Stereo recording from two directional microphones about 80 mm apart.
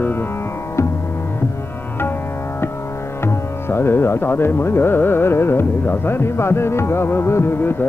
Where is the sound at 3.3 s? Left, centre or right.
Left.